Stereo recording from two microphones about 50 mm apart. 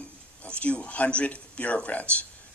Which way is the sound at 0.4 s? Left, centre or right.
Left.